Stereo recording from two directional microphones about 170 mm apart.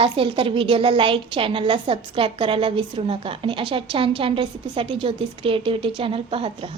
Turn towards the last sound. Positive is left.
turn(degrees=-30)  # may be behind; listen again after turning